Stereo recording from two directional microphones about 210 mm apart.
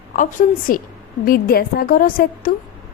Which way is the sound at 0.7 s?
40° left (ahead or behind).